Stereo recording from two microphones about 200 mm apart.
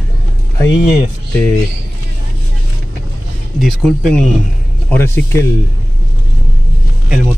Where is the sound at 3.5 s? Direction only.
Centre (ahead or behind).